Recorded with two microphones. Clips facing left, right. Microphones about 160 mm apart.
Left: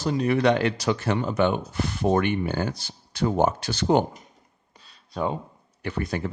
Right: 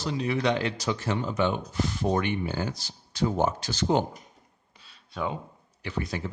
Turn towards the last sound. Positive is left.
turn(degrees=55)  # may be behind; listen again after turning